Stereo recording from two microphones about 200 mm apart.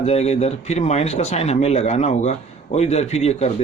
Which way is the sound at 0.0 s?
30° left (ahead or behind).